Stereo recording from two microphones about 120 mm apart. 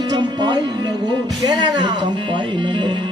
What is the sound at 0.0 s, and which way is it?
Music, 35° right (ahead or behind).